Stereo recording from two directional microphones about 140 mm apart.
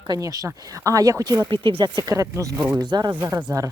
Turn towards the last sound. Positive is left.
turn(degrees=-25)  # may be behind; listen again after turning